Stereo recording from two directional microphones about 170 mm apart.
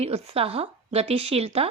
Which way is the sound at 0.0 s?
35° right (ahead or behind).